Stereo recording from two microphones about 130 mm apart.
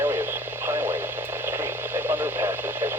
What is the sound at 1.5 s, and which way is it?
Radio, 20° right (ahead or behind).